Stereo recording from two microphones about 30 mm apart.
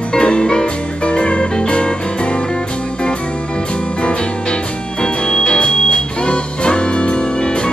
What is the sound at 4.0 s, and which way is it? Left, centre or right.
Music, left.